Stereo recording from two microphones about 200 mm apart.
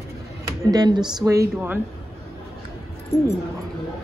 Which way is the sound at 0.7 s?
20° right (ahead or behind).